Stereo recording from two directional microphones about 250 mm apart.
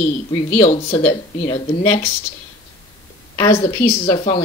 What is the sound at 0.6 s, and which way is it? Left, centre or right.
Speech, left.